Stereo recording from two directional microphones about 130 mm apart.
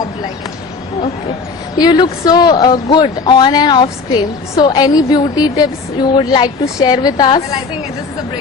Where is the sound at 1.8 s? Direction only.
35° left (ahead or behind).